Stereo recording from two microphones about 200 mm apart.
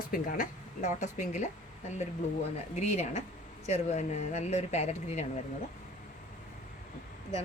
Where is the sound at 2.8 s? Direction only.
35° left (ahead or behind).